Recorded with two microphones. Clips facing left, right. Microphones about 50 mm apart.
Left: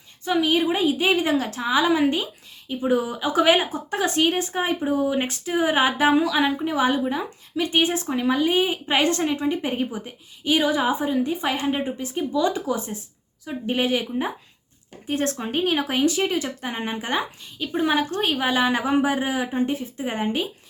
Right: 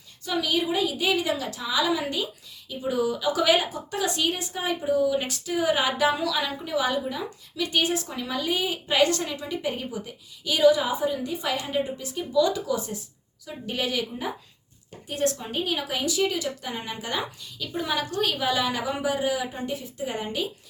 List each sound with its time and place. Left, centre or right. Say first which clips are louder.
0.3 s speech: left 5 dB; left
15.0 s speech: left 2 dB; left